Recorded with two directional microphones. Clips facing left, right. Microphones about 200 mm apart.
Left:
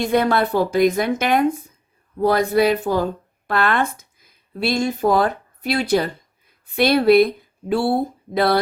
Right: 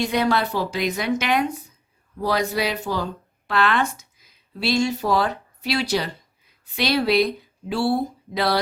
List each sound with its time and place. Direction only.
0.0 s speech: 55° left (ahead or behind)